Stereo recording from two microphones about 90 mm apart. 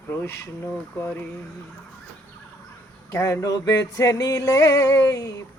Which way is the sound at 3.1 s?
35° left (ahead or behind).